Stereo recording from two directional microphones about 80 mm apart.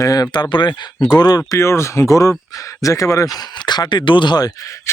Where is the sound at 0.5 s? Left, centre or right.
Left.